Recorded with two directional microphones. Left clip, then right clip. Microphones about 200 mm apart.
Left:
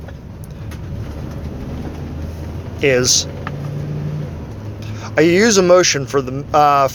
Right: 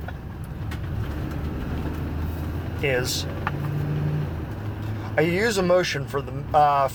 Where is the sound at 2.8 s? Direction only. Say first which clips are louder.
Left 11 dB; 50° left (ahead or behind).